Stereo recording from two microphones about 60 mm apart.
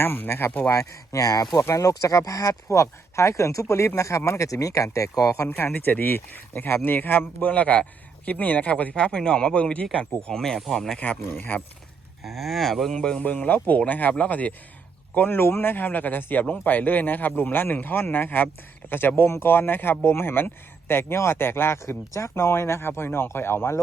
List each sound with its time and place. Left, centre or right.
0.0 s speech: left
0.7 s speech: left
5.5 s speech: left
9.0 s speech: centre
10.9 s speech: left
12.2 s speech: centre
13.2 s speech: left